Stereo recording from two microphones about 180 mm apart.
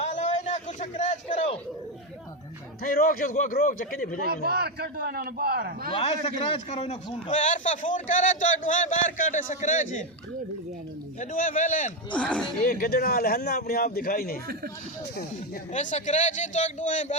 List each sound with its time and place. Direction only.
0.0 s a sound: 40° left (ahead or behind)
2.8 s a man's voice: 55° left (ahead or behind)
4.3 s a man's voice: 55° right (ahead or behind)
5.9 s a man's voice: 35° left (ahead or behind)
11.2 s a man's voice: 45° left (ahead or behind)
12.1 s speech: 5° left (ahead or behind)
12.6 s speech: 55° left (ahead or behind)
15.7 s a man's voice: 45° left (ahead or behind)